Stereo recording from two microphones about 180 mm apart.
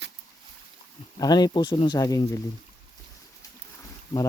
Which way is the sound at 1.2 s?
20° left (ahead or behind).